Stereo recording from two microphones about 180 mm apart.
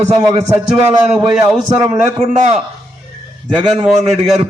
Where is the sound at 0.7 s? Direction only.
Centre (ahead or behind).